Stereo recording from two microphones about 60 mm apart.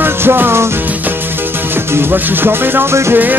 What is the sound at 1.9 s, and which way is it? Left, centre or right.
Music, right.